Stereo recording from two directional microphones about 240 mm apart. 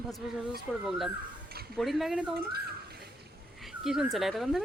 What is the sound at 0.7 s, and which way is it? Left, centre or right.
A woman's voice, centre.